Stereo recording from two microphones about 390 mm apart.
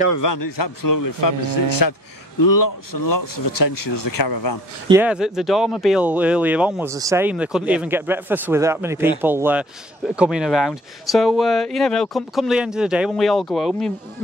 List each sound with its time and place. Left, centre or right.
0.1 s speech: left
4.8 s speech: centre